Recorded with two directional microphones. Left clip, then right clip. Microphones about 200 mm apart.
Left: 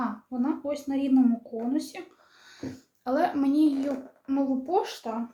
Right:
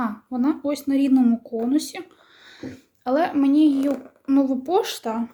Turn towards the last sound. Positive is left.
turn(degrees=-45)  # may be behind; listen again after turning